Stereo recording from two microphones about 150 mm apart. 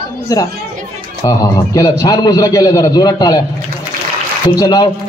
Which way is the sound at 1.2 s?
25° left (ahead or behind).